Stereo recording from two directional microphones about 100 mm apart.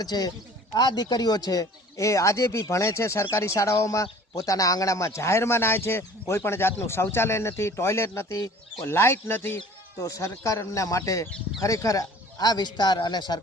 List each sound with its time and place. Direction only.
0.0 s speech: 40° left (ahead or behind)